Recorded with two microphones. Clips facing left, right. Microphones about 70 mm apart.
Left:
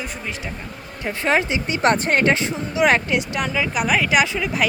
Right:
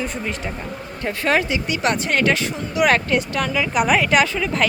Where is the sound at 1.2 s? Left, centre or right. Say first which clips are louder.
Even; left.